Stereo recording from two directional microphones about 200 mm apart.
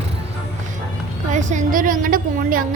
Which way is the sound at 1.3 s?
40° right (ahead or behind).